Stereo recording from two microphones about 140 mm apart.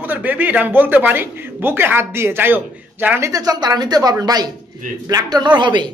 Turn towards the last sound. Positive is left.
turn(degrees=-35)  # may be behind; listen again after turning